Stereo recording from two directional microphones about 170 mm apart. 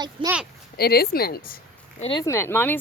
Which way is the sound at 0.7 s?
65° left (ahead or behind).